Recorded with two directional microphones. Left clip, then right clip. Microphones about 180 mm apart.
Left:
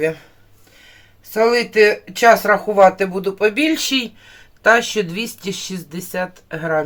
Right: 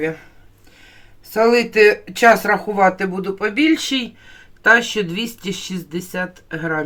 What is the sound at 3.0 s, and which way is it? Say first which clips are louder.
Speech: left 4 dB; 20° left (ahead or behind).